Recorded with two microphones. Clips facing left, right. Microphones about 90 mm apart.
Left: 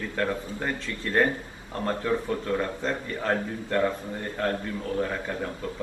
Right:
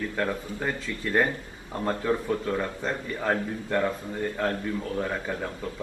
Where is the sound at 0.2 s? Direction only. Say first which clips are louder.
Left 2 dB; 10° right (ahead or behind).